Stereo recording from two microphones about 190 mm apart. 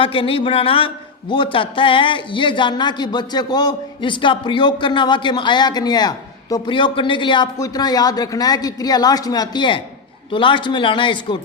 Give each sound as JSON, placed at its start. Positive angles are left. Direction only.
{"t": 0.0, "sound": "speech", "side_deg": 30}